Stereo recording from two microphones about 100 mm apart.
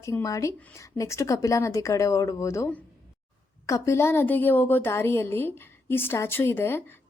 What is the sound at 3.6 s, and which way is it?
A woman's voice, 30° left (ahead or behind).